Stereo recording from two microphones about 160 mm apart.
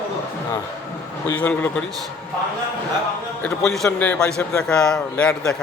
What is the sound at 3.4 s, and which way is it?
A man's voice, 5° left (ahead or behind).